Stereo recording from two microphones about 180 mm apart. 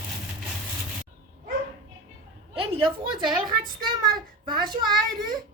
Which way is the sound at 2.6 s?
30° right (ahead or behind).